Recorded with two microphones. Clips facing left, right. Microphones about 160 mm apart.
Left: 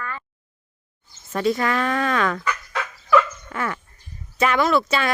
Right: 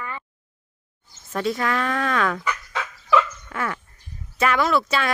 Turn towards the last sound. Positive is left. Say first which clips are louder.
# left 2 dB
turn(degrees=0)  # may be behind; listen again after turning